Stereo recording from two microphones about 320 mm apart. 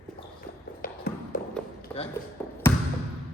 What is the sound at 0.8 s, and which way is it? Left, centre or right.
Tap, left.